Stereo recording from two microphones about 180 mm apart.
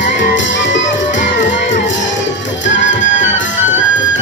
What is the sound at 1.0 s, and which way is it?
Music, 45° left (ahead or behind).